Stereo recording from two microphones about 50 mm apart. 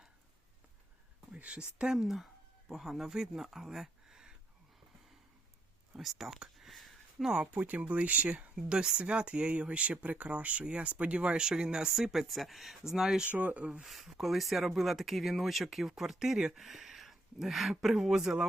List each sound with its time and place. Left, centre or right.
1.5 s speech: centre
2.6 s speech: centre
6.0 s a sound: centre
7.3 s speech: centre
7.5 s speech: right
8.5 s speech: centre
13.3 s speech: right
13.8 s speech: centre